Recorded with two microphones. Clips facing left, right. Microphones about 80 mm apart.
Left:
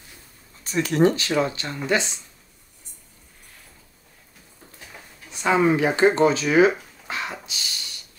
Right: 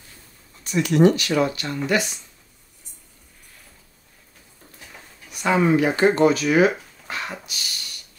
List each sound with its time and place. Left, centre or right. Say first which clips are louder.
0.7 s speech: right 2 dB; left
5.3 s speech: right 1 dB; left